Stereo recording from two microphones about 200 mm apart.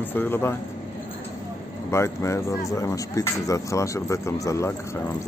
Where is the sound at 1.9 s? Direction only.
15° left (ahead or behind).